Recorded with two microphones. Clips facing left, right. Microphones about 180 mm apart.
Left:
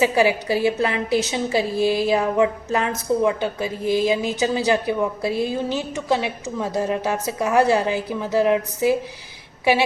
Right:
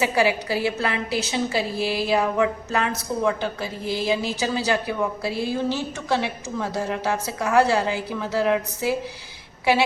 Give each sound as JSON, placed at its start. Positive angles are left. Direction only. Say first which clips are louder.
{"t": 0.0, "sound": "a woman's voice", "louder": "left 3 dB", "side_deg": 20}